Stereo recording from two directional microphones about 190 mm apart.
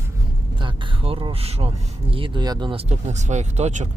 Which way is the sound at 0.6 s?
25° right (ahead or behind).